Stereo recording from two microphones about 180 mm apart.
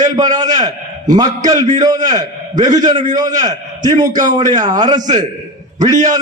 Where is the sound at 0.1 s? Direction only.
20° right (ahead or behind).